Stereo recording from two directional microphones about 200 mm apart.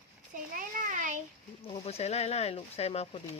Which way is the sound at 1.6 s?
30° left (ahead or behind).